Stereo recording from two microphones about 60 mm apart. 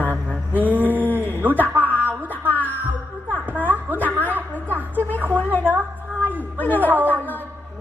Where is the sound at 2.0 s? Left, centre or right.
Right.